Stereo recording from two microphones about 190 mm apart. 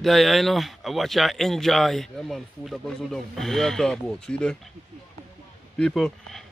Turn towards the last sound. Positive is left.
turn(degrees=0)  # may be behind; listen again after turning